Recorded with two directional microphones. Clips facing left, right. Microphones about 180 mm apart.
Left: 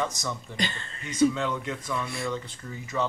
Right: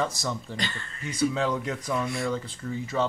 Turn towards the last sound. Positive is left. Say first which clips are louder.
# right 3 dB
turn(degrees=-30)  # may be behind; listen again after turning